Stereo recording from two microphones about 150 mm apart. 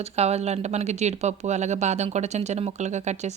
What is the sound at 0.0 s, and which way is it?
Speech, 45° right (ahead or behind).